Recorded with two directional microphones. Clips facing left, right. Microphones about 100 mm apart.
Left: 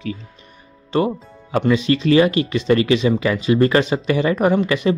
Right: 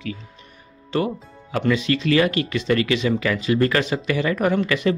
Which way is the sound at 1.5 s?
25° left (ahead or behind).